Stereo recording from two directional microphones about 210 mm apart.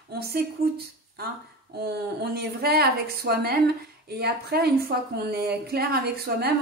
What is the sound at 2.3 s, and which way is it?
A woman's voice, 45° right (ahead or behind).